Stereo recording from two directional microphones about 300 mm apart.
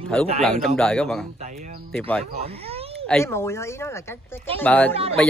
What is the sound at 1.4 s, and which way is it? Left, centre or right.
Speech, right.